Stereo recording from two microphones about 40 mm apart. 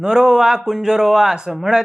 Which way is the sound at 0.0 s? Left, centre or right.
Centre.